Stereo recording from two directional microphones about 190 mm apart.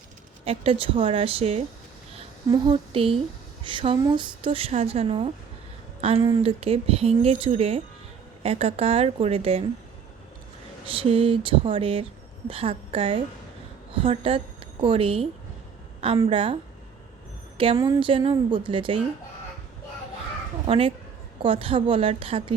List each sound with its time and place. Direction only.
0.4 s a woman's voice: 30° right (ahead or behind)
10.8 s a woman's voice: 30° right (ahead or behind)
17.6 s a woman's voice: 25° right (ahead or behind)
20.7 s a woman's voice: 30° right (ahead or behind)